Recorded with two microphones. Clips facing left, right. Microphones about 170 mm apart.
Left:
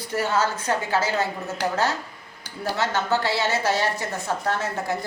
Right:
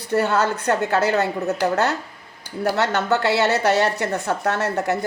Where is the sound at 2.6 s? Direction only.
70° right (ahead or behind).